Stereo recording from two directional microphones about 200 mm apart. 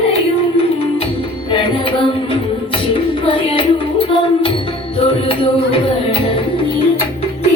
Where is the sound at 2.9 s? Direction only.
25° left (ahead or behind).